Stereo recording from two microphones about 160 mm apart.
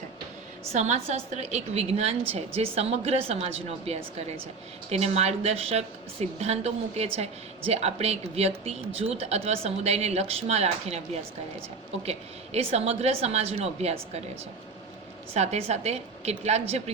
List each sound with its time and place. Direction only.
0.7 s speech: 45° right (ahead or behind)
12.0 s speech: 40° right (ahead or behind)
15.3 s a woman's voice: 40° right (ahead or behind)